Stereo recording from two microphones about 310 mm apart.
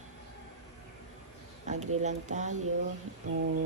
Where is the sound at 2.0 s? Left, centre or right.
Right.